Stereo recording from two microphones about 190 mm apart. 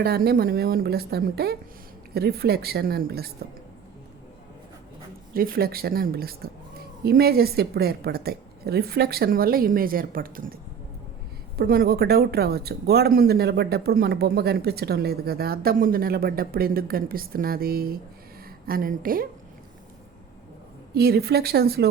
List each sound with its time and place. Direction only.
0.0 s a woman's voice: 55° right (ahead or behind)
5.3 s speech: 50° right (ahead or behind)
20.9 s a woman's voice: 55° right (ahead or behind)